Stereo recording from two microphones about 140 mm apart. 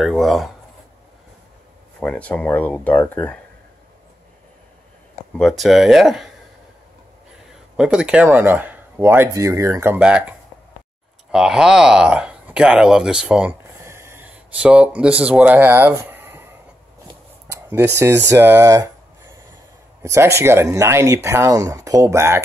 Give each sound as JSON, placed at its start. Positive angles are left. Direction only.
{"t": 0.0, "sound": "speech", "side_deg": 0}
{"t": 2.0, "sound": "speech", "side_deg": 10}
{"t": 5.4, "sound": "speech", "side_deg": 0}
{"t": 7.7, "sound": "speech", "side_deg": -5}
{"t": 11.3, "sound": "speech", "side_deg": -5}
{"t": 17.5, "sound": "speech", "side_deg": -15}